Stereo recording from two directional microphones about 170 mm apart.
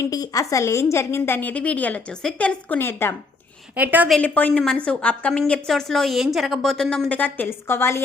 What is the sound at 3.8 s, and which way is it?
Speech, 10° right (ahead or behind).